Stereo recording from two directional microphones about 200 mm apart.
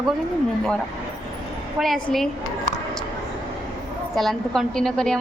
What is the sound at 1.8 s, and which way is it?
Speech, centre (ahead or behind).